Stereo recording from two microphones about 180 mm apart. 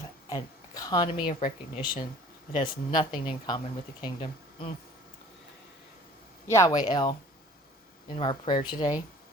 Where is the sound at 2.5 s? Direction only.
25° left (ahead or behind).